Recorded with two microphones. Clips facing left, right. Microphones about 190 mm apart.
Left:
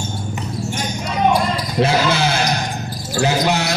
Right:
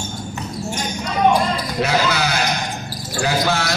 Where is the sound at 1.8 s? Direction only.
25° left (ahead or behind).